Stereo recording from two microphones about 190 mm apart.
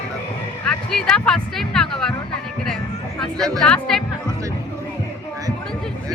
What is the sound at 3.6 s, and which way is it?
Music, centre (ahead or behind).